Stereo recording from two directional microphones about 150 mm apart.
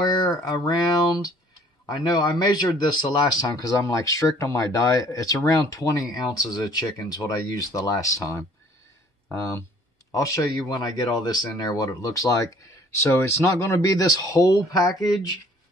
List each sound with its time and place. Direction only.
0.0 s speech: 25° left (ahead or behind)
1.9 s speech: 25° left (ahead or behind)